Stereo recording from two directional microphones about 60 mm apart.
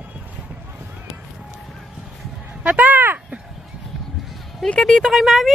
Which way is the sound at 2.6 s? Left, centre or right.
Right.